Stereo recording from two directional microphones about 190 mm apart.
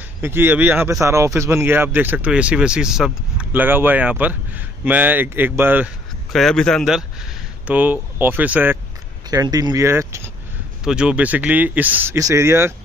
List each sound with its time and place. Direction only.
0.2 s speech: 10° right (ahead or behind)
6.3 s a man's voice: centre (ahead or behind)
9.3 s speech: 20° right (ahead or behind)